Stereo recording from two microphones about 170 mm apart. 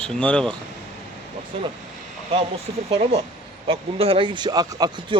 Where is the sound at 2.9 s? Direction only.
35° right (ahead or behind).